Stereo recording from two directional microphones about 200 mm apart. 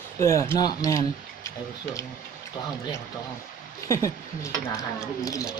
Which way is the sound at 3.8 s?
15° left (ahead or behind).